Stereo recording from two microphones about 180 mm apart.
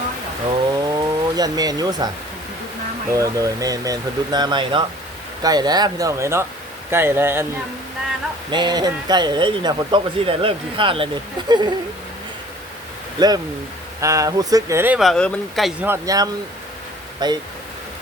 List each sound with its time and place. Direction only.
0.9 s a sound: 20° right (ahead or behind)
3.1 s speech: 20° right (ahead or behind)
8.4 s speech: 25° right (ahead or behind)
13.1 s speech: 20° right (ahead or behind)
14.9 s speech: centre (ahead or behind)
15.9 s speech: 20° right (ahead or behind)